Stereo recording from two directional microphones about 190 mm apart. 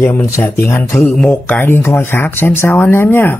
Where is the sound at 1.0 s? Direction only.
5° left (ahead or behind).